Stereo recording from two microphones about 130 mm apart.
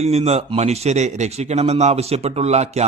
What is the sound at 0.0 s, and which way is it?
Speech, 55° right (ahead or behind).